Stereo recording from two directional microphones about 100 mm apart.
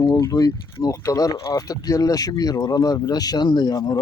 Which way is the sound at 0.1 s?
35° left (ahead or behind).